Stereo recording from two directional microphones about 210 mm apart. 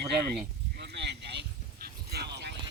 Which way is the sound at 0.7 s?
55° right (ahead or behind).